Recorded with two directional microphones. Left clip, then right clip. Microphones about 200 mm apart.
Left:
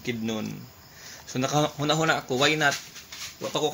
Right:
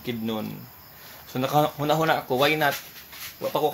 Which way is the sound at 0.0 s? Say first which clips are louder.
Right 1 dB; 10° left (ahead or behind).